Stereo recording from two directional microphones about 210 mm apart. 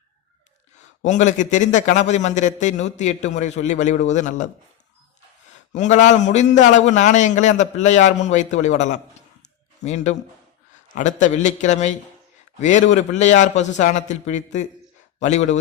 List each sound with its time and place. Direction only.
0.8 s a man's voice: 35° left (ahead or behind)
5.7 s a man's voice: 35° left (ahead or behind)
9.4 s a sound: 35° left (ahead or behind)
10.8 s a man's voice: 35° left (ahead or behind)